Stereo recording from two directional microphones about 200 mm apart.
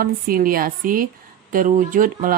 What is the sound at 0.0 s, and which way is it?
Speech, 45° right (ahead or behind).